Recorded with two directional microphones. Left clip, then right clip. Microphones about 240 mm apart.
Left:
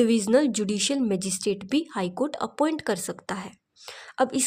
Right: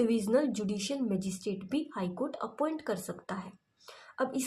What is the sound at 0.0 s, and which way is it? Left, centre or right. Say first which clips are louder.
Speech: left 7 dB; left.